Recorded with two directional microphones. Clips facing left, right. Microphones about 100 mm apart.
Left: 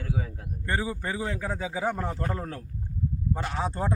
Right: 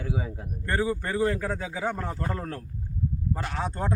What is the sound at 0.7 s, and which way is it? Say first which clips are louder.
A man's voice: right 3 dB; 5° left (ahead or behind).